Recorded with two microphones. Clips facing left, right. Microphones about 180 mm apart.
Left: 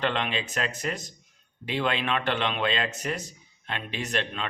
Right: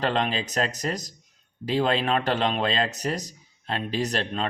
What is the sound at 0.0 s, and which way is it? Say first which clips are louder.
A man's voice: right 3 dB; 40° right (ahead or behind).